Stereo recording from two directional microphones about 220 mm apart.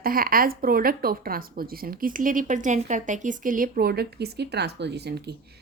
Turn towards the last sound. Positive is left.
turn(degrees=-50)  # may be behind; listen again after turning